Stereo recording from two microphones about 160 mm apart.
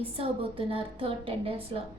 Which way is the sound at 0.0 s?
35° right (ahead or behind).